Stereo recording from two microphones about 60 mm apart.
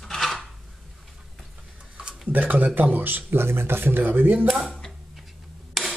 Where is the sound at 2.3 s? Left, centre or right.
Right.